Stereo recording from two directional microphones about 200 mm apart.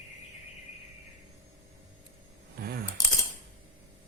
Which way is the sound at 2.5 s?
50° right (ahead or behind).